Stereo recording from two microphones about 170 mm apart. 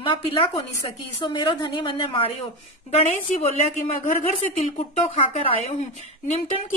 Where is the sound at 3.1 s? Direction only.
45° left (ahead or behind).